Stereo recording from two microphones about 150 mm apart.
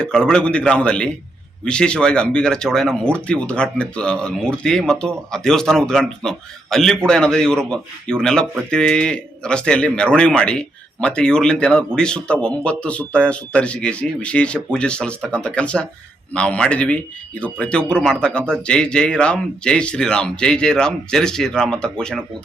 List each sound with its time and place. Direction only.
0.0 s speech: 5° left (ahead or behind)